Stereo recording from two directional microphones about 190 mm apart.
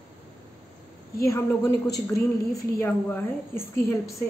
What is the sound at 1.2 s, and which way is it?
A woman's voice, 15° left (ahead or behind).